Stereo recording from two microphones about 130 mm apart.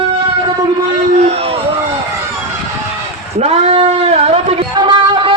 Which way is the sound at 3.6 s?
55° right (ahead or behind).